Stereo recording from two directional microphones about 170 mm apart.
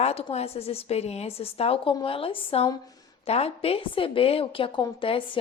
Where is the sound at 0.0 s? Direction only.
35° left (ahead or behind).